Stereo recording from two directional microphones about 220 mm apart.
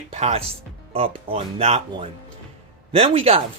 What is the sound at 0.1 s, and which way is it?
Speech, 30° right (ahead or behind).